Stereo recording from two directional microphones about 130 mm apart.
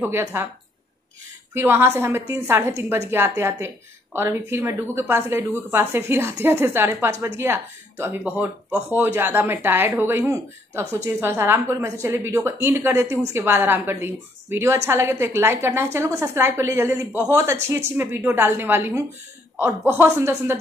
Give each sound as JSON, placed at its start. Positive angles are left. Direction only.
{"t": 0.0, "sound": "a woman's voice", "side_deg": -20}
{"t": 1.5, "sound": "a woman's voice", "side_deg": -20}